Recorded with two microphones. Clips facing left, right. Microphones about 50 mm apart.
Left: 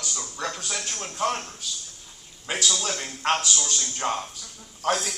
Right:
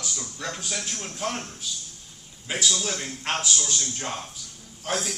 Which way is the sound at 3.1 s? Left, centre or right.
Left.